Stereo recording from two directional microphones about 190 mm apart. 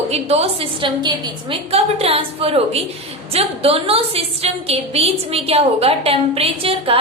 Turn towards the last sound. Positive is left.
turn(degrees=-30)  # may be behind; listen again after turning